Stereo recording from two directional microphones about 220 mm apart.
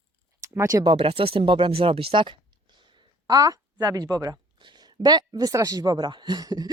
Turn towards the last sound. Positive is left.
turn(degrees=-20)  # may be behind; listen again after turning